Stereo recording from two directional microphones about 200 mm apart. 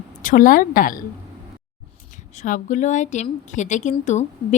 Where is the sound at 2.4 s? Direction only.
40° left (ahead or behind).